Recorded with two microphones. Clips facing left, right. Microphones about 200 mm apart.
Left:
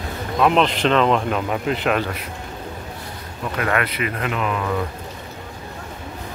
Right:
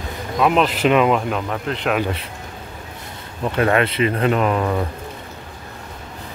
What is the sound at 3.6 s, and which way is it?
Speech, 30° right (ahead or behind).